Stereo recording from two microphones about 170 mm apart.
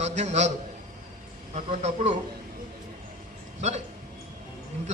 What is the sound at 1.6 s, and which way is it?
Speech, 40° right (ahead or behind).